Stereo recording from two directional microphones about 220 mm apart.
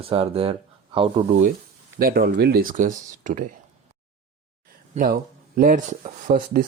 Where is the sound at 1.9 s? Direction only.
40° right (ahead or behind).